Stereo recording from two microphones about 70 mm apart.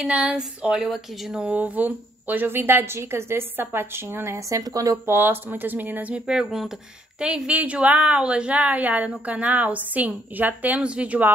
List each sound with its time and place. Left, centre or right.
0.0 s speech: centre
1.5 s a woman's voice: right
4.6 s speech: right
5.0 s a woman's voice: right